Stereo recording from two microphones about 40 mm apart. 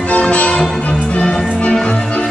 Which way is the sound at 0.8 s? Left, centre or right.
Left.